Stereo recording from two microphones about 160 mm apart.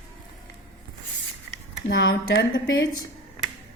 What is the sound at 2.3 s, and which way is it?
Speech, 90° left.